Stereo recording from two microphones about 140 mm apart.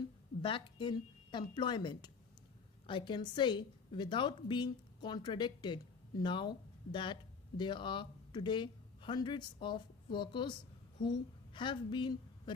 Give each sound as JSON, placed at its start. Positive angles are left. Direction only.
{"t": 0.4, "sound": "a woman's voice", "side_deg": 35}